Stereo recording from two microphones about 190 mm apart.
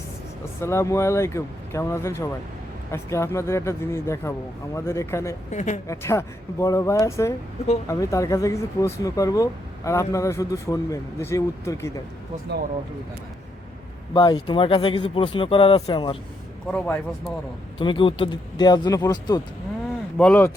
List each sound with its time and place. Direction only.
0.6 s speech: 15° left (ahead or behind)
5.5 s a woman's voice: 35° left (ahead or behind)
5.9 s speech: 15° left (ahead or behind)
14.1 s speech: 20° left (ahead or behind)
16.7 s speech: 5° left (ahead or behind)
17.7 s speech: 25° left (ahead or behind)
20.1 s speech: 5° left (ahead or behind)